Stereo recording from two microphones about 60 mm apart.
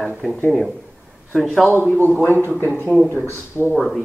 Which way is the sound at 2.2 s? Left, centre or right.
Left.